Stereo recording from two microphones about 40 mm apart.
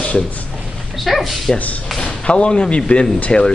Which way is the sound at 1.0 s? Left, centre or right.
Centre.